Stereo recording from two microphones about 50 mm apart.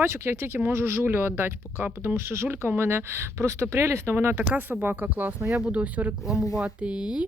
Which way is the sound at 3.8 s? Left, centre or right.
Right.